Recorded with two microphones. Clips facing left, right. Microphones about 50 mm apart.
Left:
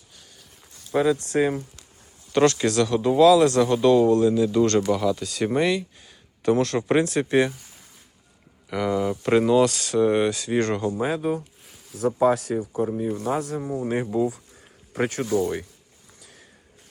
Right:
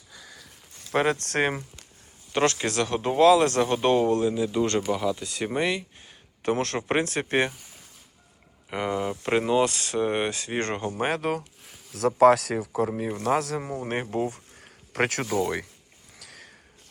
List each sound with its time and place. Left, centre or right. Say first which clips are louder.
0.9 s speech: left 3 dB; right
2.3 s speech: left 5 dB; right
4.4 s speech: left 5 dB; centre
5.5 s a sound: left 3 dB; right
6.7 s speech: left 5 dB; right
8.7 s speech: left 4 dB; right
11.0 s speech: left 2 dB; right
11.6 s a sound: even; centre
11.9 s speech: right 3 dB; right
13.0 s a man's voice: left 3 dB; right
13.2 s speech: right 5 dB; right
13.7 s speech: left 6 dB; right
14.9 s speech: left 2 dB; right
16.1 s sniff: right 4 dB; right